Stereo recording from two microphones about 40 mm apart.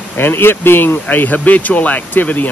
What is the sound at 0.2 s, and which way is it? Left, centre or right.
Speech, left.